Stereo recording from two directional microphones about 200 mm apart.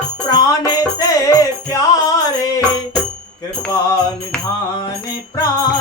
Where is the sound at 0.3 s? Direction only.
20° left (ahead or behind).